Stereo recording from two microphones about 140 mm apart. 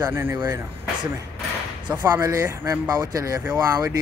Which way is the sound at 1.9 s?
15° right (ahead or behind).